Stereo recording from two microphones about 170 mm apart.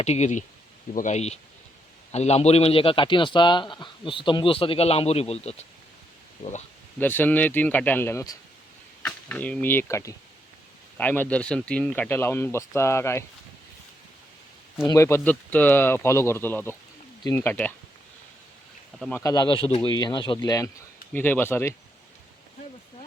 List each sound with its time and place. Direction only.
0.0 s a man's voice: 40° left (ahead or behind)
7.0 s speech: 10° left (ahead or behind)
14.8 s speech: 15° left (ahead or behind)
18.9 s speech: 5° left (ahead or behind)
19.2 s speech: 25° left (ahead or behind)
21.1 s speech: 10° left (ahead or behind)